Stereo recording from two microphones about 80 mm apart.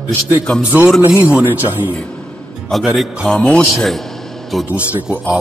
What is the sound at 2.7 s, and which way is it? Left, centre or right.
A man's voice, centre.